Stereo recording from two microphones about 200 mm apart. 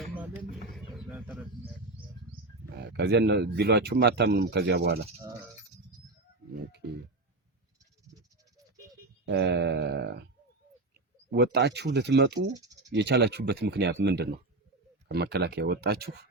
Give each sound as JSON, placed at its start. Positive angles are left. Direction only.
{"t": 0.9, "sound": "bird", "side_deg": 0}
{"t": 2.8, "sound": "speech", "side_deg": -60}
{"t": 9.2, "sound": "a sound", "side_deg": -55}
{"t": 11.3, "sound": "speech", "side_deg": -55}